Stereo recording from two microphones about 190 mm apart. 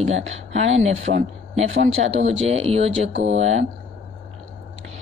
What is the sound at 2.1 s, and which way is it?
Speech, 35° right (ahead or behind).